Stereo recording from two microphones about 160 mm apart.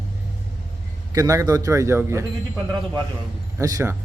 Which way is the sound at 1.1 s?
20° right (ahead or behind).